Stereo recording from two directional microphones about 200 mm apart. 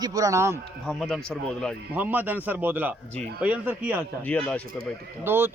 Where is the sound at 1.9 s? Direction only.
10° right (ahead or behind).